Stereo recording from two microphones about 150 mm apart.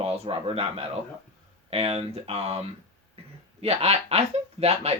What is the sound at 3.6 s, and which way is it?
Speech, 45° right (ahead or behind).